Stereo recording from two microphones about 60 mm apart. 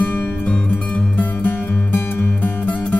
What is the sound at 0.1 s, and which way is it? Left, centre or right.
Music, left.